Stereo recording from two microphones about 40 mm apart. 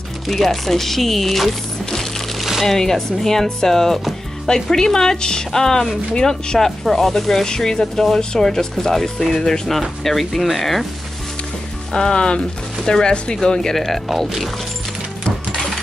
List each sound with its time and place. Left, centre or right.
0.3 s speech: centre
6.6 s speech: centre
11.9 s speech: centre
15.2 s coin: left